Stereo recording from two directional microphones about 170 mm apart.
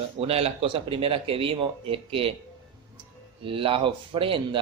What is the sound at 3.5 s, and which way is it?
Speech, 30° right (ahead or behind).